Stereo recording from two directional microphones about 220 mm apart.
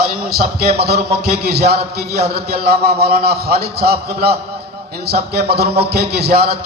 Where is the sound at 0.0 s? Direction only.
45° right (ahead or behind).